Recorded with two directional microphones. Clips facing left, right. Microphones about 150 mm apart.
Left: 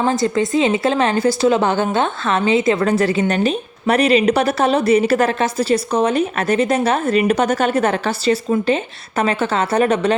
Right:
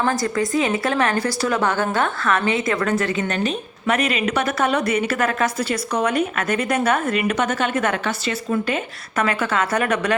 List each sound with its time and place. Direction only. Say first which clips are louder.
0.0 s a woman's voice: left 4 dB; 25° left (ahead or behind)